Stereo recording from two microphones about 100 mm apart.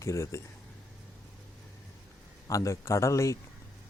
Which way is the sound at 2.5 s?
35° left (ahead or behind).